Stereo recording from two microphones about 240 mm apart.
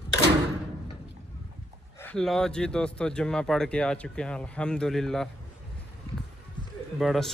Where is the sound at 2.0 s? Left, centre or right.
Centre.